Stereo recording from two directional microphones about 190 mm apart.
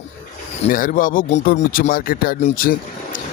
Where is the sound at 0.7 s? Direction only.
45° left (ahead or behind).